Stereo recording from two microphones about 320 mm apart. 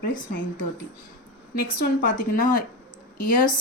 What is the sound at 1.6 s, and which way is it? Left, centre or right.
A woman's voice, left.